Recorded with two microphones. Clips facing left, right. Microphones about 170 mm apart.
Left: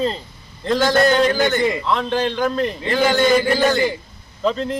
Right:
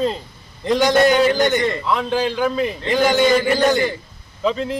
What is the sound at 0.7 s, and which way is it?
A man's voice, 15° right (ahead or behind).